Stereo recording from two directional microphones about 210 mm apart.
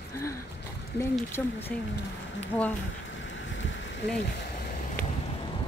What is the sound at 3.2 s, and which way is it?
Boat, 60° left (ahead or behind).